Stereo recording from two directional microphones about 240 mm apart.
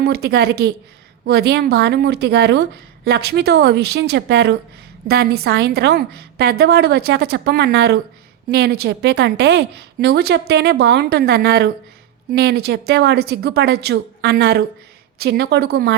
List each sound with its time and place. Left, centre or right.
0.0 s a woman's voice: right